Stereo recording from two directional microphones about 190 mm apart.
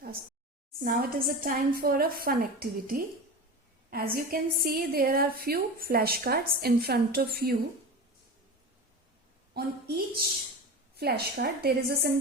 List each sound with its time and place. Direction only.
0.8 s a woman's voice: 50° right (ahead or behind)
9.6 s a woman's voice: 55° right (ahead or behind)